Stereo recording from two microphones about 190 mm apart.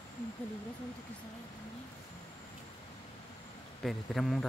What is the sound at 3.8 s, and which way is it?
Speech, centre (ahead or behind).